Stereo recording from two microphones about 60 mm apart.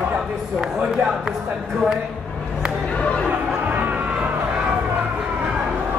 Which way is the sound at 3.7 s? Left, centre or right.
Right.